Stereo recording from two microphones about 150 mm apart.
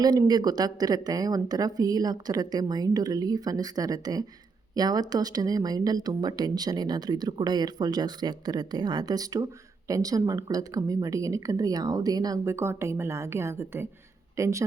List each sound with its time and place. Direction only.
0.0 s speech: 25° right (ahead or behind)